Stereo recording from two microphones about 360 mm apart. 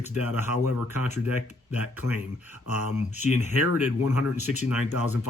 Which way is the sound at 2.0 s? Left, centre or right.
Left.